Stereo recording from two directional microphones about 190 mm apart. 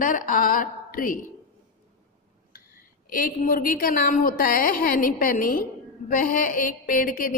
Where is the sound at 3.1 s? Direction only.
50° left (ahead or behind).